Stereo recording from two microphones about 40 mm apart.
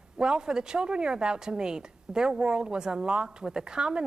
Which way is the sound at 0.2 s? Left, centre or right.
Centre.